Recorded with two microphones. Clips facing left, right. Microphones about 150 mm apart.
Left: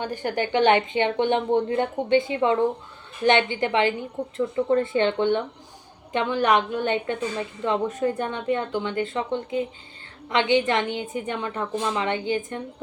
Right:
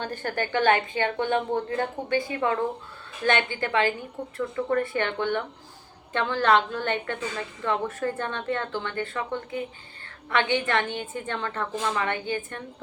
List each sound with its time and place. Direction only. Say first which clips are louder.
0.0 s a woman's voice: left 3 dB; 15° left (ahead or behind)